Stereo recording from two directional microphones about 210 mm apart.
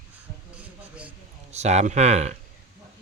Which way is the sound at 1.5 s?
30° right (ahead or behind).